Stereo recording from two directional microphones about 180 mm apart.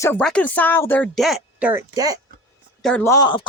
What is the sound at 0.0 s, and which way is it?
Speech, 10° left (ahead or behind).